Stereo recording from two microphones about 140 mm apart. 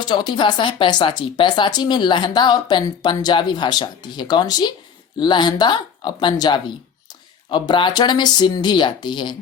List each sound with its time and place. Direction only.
0.0 s speech: 30° left (ahead or behind)